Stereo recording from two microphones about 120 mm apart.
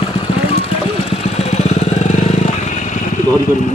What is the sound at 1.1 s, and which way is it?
Vehicle, 60° left (ahead or behind).